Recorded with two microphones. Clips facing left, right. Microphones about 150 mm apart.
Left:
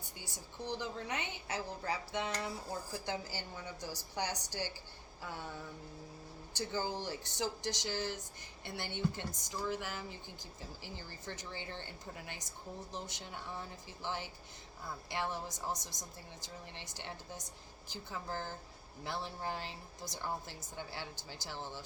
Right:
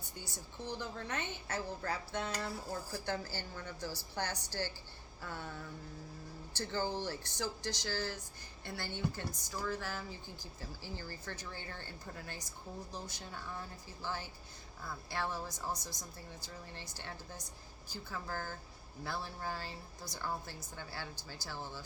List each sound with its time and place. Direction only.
0.6 s speech: 15° left (ahead or behind)
6.5 s a woman's voice: 15° left (ahead or behind)